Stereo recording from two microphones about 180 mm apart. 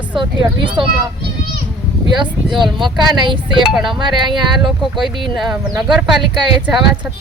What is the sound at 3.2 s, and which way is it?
Speech, 25° right (ahead or behind).